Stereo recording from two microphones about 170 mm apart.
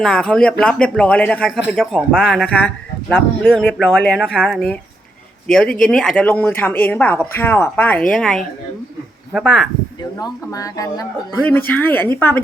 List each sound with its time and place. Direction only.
0.0 s speech: 5° left (ahead or behind)
10.0 s speech: 20° left (ahead or behind)
11.4 s speech: 10° left (ahead or behind)